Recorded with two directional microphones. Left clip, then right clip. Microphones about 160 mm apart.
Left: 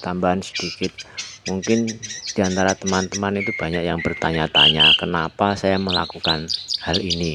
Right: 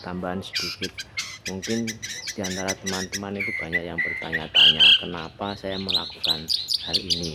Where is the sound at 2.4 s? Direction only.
45° left (ahead or behind).